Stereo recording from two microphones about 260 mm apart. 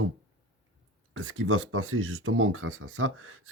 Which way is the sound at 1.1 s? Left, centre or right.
Right.